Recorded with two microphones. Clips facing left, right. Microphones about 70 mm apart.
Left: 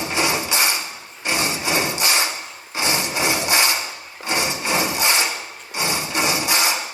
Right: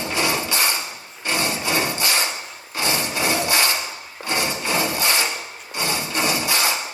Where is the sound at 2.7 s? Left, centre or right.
Centre.